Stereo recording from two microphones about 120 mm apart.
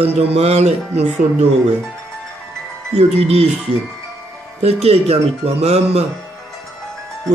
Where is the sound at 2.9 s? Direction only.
60° right (ahead or behind).